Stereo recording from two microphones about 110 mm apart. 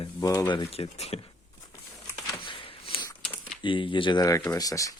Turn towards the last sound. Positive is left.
turn(degrees=30)  # may be behind; listen again after turning